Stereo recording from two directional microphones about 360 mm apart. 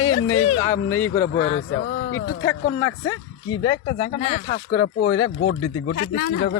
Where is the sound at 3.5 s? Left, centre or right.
Centre.